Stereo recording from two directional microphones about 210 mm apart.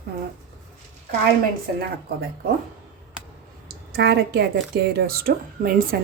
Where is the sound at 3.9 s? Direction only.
50° right (ahead or behind).